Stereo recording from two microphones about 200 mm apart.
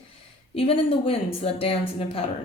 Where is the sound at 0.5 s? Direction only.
30° left (ahead or behind).